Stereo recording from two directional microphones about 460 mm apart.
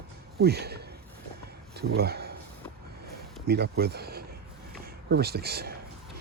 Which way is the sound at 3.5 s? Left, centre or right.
Right.